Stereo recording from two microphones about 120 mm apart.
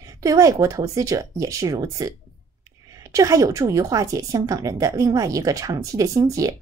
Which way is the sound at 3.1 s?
30° right (ahead or behind).